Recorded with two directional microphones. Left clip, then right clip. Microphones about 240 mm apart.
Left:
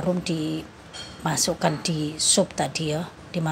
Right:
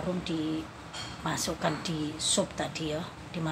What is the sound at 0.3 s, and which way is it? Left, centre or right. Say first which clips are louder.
A woman's voice: left 4 dB; left.